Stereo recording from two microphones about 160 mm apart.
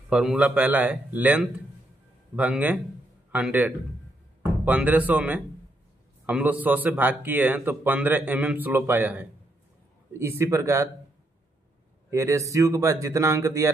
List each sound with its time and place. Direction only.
0.1 s speech: 5° right (ahead or behind)
12.1 s speech: 15° right (ahead or behind)